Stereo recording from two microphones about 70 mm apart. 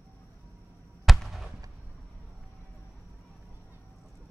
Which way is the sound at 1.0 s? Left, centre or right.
Centre.